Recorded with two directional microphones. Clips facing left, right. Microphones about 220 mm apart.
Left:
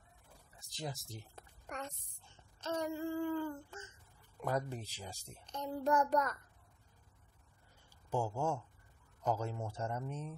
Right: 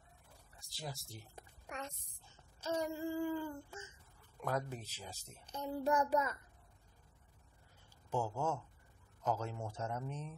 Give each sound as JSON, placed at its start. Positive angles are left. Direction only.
{"t": 0.6, "sound": "a sound", "side_deg": 20}
{"t": 1.8, "sound": "speech", "side_deg": 0}
{"t": 2.6, "sound": "child singing", "side_deg": -10}
{"t": 4.4, "sound": "speech", "side_deg": 10}
{"t": 5.4, "sound": "child singing", "side_deg": -10}
{"t": 8.1, "sound": "speech", "side_deg": 10}